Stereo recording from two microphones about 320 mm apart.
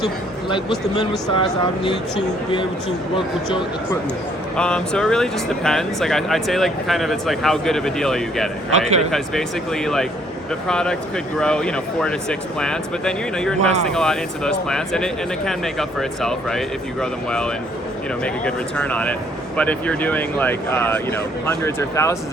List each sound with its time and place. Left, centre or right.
1.4 s speech: centre
4.5 s speech: centre